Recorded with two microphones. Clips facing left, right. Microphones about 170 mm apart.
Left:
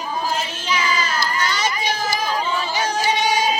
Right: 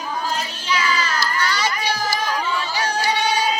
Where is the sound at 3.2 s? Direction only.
15° left (ahead or behind).